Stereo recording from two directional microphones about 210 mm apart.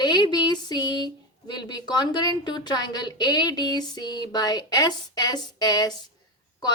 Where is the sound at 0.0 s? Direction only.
20° left (ahead or behind).